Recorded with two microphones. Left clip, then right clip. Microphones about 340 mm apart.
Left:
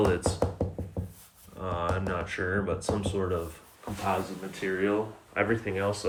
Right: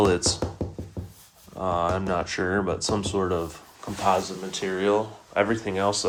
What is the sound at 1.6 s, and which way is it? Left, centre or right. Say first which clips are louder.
Speech: right 6 dB; centre.